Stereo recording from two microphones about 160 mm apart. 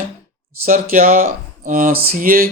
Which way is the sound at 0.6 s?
55° right (ahead or behind).